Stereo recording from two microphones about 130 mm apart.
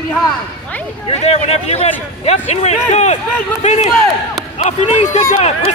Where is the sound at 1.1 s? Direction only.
55° left (ahead or behind).